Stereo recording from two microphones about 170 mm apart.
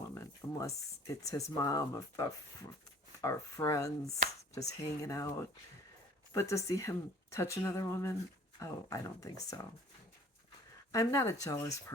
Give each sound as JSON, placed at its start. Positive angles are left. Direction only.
{"t": 0.1, "sound": "a sound", "side_deg": 15}
{"t": 1.3, "sound": "speech", "side_deg": 20}
{"t": 10.9, "sound": "speech", "side_deg": 20}